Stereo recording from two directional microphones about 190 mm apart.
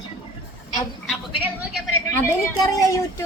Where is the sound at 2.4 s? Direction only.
15° left (ahead or behind).